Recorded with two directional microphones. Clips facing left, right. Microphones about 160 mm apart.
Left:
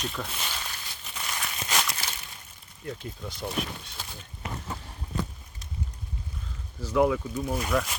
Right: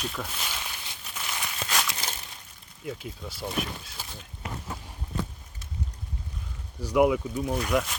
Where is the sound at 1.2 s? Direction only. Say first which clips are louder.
Even; centre (ahead or behind).